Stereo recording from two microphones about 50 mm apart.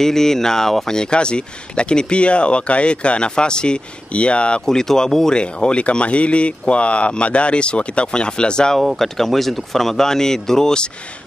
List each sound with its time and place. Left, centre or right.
0.0 s speech: centre
4.6 s speech: centre
8.7 s speech: centre